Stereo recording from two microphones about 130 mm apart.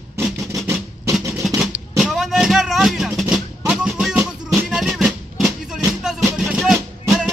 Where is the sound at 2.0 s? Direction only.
5° right (ahead or behind).